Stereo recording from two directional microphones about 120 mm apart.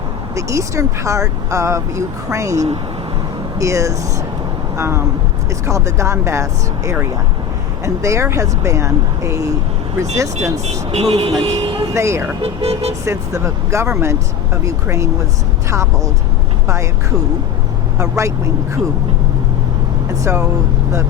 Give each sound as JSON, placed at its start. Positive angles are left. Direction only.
{"t": 0.3, "sound": "speech", "side_deg": -25}
{"t": 8.0, "sound": "speech", "side_deg": -25}
{"t": 10.7, "sound": "speech", "side_deg": -65}
{"t": 11.9, "sound": "speech", "side_deg": -25}
{"t": 12.4, "sound": "speech", "side_deg": -55}
{"t": 13.1, "sound": "speech", "side_deg": -25}
{"t": 20.2, "sound": "speech", "side_deg": -25}